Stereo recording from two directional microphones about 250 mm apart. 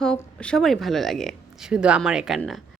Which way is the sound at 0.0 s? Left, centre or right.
Centre.